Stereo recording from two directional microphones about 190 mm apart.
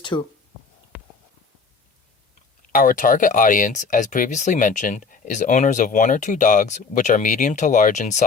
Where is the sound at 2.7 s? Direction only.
45° left (ahead or behind).